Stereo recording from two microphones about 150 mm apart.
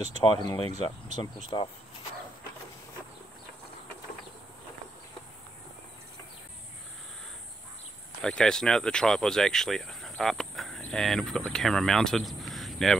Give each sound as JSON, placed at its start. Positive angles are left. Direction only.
{"t": 0.2, "sound": "speech", "side_deg": 30}
{"t": 8.2, "sound": "speech", "side_deg": 5}